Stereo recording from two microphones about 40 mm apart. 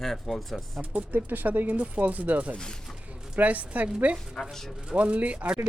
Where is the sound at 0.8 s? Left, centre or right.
Right.